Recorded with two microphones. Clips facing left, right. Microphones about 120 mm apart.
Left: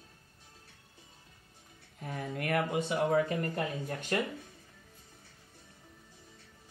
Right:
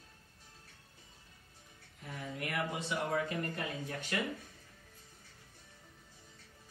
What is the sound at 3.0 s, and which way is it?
Speech, 30° left (ahead or behind).